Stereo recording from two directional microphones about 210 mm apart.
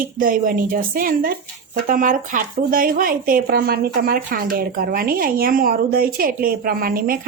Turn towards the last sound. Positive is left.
turn(degrees=-45)  # may be behind; listen again after turning